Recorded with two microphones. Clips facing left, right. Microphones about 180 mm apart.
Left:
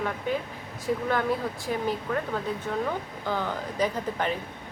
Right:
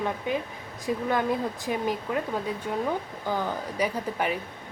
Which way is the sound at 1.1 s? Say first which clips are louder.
Right 3 dB; 20° right (ahead or behind).